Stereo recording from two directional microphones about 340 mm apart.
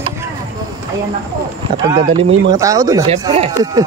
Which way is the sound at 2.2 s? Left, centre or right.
Right.